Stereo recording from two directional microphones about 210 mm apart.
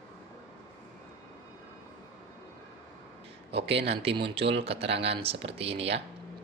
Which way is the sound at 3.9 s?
25° right (ahead or behind).